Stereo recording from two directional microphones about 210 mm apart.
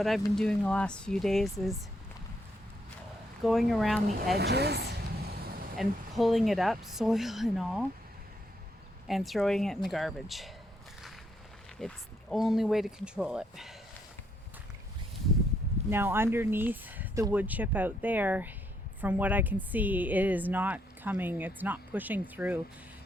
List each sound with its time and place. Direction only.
0.3 s speech: 5° left (ahead or behind)
3.4 s speech: centre (ahead or behind)
4.4 s speech: 50° right (ahead or behind)
5.3 s vehicle: 45° right (ahead or behind)
5.7 s speech: centre (ahead or behind)
9.0 s speech: centre (ahead or behind)
11.8 s speech: centre (ahead or behind)
15.9 s a woman's voice: 10° right (ahead or behind)